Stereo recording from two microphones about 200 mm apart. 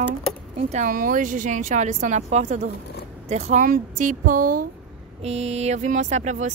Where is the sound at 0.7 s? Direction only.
40° right (ahead or behind).